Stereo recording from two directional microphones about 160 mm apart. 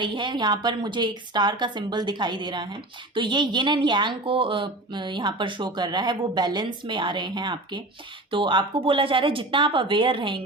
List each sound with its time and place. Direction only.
0.0 s a woman's voice: 30° right (ahead or behind)